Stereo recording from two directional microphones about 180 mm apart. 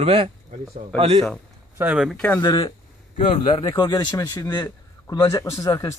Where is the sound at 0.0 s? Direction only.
35° right (ahead or behind).